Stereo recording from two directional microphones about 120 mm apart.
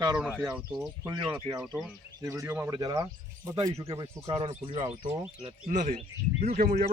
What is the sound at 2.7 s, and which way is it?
Speech, 35° right (ahead or behind).